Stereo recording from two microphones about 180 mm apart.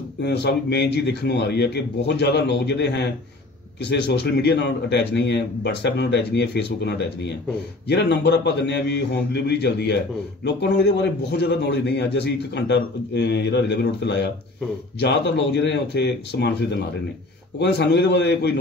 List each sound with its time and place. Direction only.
0.2 s a man's voice: 70° left (ahead or behind)